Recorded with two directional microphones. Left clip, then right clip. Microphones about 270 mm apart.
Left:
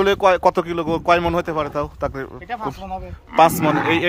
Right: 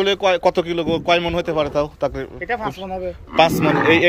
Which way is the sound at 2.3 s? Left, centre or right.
Left.